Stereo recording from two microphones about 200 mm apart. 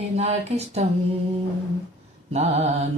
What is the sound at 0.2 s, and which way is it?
Speech, 35° right (ahead or behind).